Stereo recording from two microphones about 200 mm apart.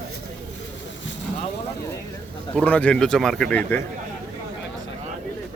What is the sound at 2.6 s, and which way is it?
Speech, 5° left (ahead or behind).